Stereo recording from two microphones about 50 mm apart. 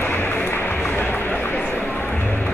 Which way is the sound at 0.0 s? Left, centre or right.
Left.